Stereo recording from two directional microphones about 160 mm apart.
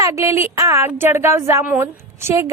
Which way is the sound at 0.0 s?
20° right (ahead or behind).